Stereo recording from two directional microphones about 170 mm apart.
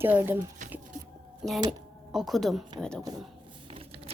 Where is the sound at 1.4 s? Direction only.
Centre (ahead or behind).